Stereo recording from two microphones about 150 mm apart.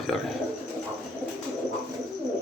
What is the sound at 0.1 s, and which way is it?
Cricket, 5° left (ahead or behind).